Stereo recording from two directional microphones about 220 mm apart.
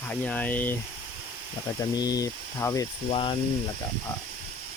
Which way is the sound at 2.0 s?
15° left (ahead or behind).